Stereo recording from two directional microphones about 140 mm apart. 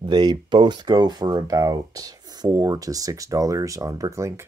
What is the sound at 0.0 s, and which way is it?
Speech, 30° right (ahead or behind).